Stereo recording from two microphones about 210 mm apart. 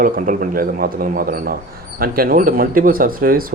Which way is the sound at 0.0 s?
40° right (ahead or behind).